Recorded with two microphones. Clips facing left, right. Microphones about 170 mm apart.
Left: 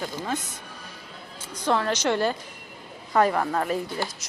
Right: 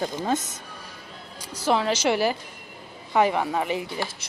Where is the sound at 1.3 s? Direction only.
10° right (ahead or behind).